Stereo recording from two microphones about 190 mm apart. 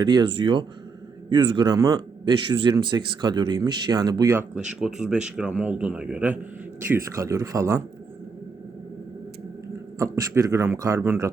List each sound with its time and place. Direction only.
0.0 s a man's voice: 20° right (ahead or behind)
10.0 s a man's voice: 15° right (ahead or behind)